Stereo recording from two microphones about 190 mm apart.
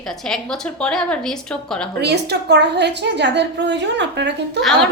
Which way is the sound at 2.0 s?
60° right (ahead or behind).